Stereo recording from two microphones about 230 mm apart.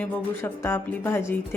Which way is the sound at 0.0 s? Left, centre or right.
Centre.